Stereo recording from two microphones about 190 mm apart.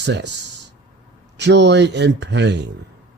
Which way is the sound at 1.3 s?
65° right (ahead or behind).